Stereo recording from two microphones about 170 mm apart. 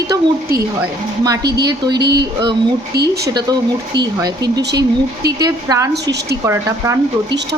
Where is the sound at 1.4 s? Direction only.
75° right (ahead or behind).